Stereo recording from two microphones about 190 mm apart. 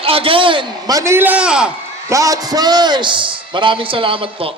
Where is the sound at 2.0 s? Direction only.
15° right (ahead or behind).